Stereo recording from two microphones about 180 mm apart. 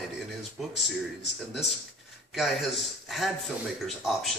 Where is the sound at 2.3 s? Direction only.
Centre (ahead or behind).